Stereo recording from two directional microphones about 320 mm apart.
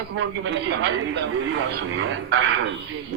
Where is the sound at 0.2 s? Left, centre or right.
Right.